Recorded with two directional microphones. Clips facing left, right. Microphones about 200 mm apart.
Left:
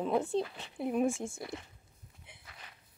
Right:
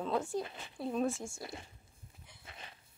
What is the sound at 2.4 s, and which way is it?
Walk, 25° right (ahead or behind).